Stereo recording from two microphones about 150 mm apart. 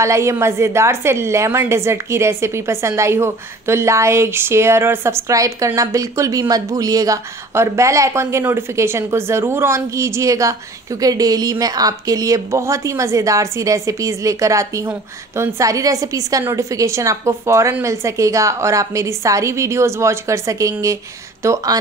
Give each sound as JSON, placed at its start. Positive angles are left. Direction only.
{"t": 0.0, "sound": "a woman's voice", "side_deg": -20}